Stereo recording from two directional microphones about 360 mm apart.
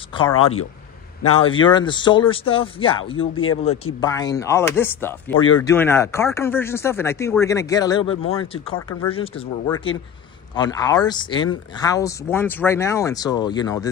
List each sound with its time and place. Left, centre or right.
0.1 s speech: centre
1.3 s speech: centre
3.2 s speech: left
4.0 s speech: centre